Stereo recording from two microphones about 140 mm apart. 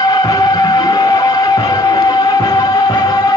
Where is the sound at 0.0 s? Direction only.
25° left (ahead or behind).